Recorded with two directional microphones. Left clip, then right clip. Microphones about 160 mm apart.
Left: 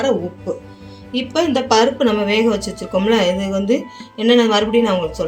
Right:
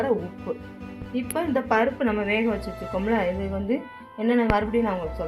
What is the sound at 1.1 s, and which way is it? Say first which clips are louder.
Speech: left 8 dB; centre (ahead or behind).